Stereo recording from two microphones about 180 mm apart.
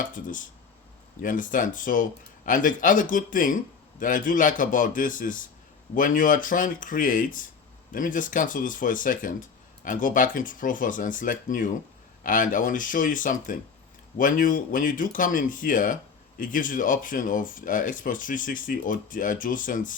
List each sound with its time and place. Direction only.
0.0 s speech: 45° left (ahead or behind)